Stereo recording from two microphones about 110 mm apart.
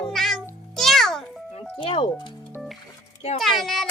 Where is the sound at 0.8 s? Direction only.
5° left (ahead or behind).